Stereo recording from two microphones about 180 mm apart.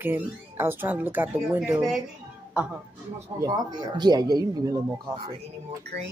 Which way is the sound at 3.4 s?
20° right (ahead or behind).